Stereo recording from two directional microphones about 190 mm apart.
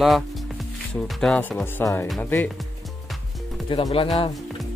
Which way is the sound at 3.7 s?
25° left (ahead or behind).